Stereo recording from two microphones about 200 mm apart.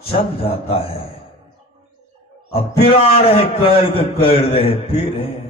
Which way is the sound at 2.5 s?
30° left (ahead or behind).